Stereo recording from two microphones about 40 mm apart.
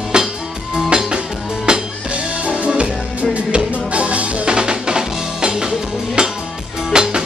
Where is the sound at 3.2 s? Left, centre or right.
Right.